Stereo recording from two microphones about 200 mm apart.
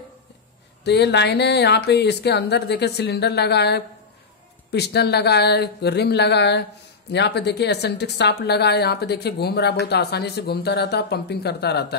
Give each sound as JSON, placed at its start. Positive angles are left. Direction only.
{"t": 0.8, "sound": "a woman's voice", "side_deg": 55}